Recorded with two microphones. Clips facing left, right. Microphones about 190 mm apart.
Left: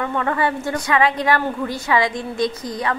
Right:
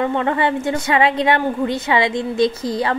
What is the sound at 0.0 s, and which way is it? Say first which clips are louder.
A woman's voice: right 3 dB; 25° right (ahead or behind).